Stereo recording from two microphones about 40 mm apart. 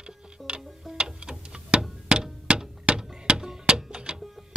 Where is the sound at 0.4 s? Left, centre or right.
Centre.